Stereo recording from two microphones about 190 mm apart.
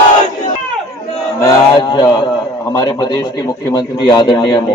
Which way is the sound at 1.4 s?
15° left (ahead or behind).